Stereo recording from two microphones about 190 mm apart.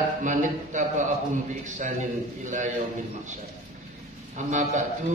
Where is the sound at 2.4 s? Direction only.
40° right (ahead or behind).